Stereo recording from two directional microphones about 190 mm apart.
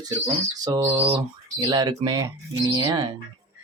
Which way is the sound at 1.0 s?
25° right (ahead or behind).